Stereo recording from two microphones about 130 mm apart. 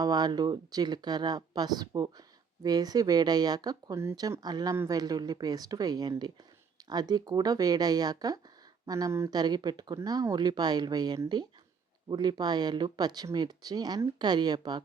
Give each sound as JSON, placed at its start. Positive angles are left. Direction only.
{"t": 0.0, "sound": "speech", "side_deg": -30}